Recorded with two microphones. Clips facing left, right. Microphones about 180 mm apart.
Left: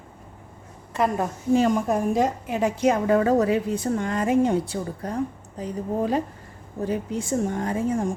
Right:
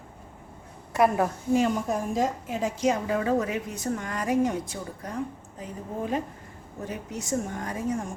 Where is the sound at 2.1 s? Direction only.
65° left (ahead or behind).